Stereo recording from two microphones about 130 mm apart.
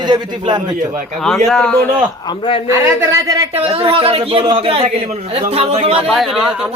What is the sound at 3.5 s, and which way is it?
Speech, 50° right (ahead or behind).